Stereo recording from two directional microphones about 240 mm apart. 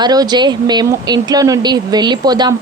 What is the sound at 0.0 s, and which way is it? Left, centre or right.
A woman's voice, centre.